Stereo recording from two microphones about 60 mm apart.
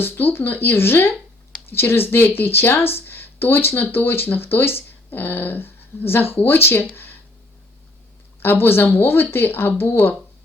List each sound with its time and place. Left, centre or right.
0.0 s speech: left
8.4 s speech: left